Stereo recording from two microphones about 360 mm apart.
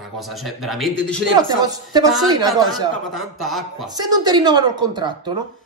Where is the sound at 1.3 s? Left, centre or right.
Centre.